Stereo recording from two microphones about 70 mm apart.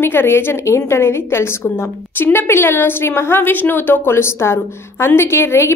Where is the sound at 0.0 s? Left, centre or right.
Left.